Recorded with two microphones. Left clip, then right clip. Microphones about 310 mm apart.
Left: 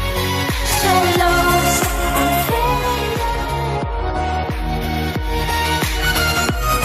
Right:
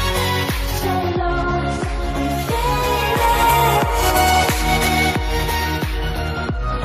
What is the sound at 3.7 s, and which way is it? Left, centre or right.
Music, right.